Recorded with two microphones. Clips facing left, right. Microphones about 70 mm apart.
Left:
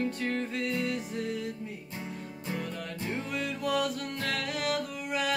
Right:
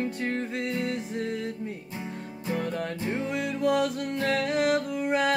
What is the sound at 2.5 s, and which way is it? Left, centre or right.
Music, right.